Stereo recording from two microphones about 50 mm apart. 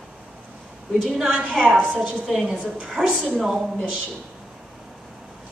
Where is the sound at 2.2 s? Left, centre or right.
Centre.